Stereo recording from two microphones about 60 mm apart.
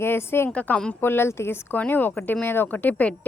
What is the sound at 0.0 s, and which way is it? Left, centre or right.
Speech, left.